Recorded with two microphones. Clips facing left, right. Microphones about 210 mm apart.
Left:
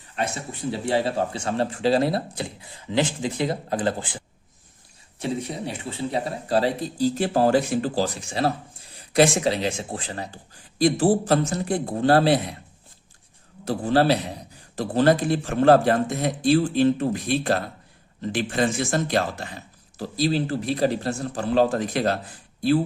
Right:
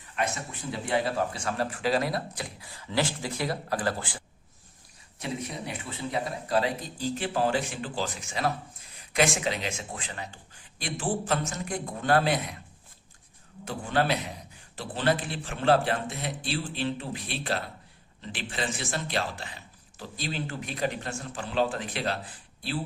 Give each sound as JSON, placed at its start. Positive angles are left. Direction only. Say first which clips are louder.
{"t": 0.2, "sound": "a man's voice", "louder": "left 3 dB", "side_deg": 30}
{"t": 5.2, "sound": "speech", "louder": "left 6 dB", "side_deg": 30}
{"t": 13.7, "sound": "speech", "louder": "left 8 dB", "side_deg": 35}